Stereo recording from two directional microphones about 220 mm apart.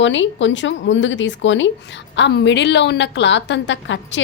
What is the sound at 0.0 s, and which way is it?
A woman's voice, 55° left (ahead or behind).